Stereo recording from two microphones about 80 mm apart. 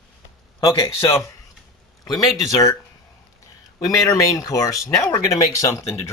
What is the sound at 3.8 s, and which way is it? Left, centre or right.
Speech, left.